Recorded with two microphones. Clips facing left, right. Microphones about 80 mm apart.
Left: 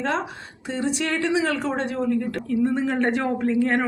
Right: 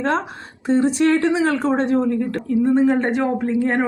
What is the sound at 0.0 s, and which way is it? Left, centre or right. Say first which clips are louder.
Speech: right 4 dB; right.